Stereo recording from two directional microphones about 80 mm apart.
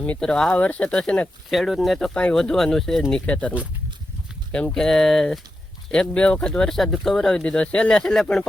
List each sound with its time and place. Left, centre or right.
0.2 s speech: centre
1.5 s speech: centre
3.2 s speech: centre
4.5 s speech: centre